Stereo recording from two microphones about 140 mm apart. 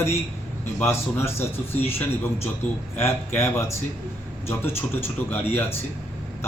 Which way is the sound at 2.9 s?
20° left (ahead or behind).